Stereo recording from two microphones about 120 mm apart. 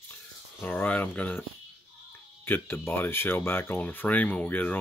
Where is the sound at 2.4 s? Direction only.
15° left (ahead or behind).